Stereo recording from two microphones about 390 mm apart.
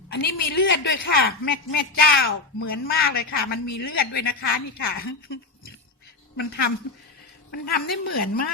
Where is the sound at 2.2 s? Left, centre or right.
Left.